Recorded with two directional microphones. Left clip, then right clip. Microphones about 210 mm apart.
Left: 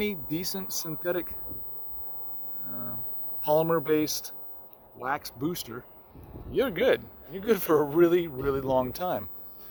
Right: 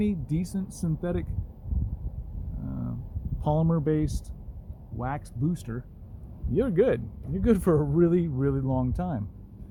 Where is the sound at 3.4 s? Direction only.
20° left (ahead or behind).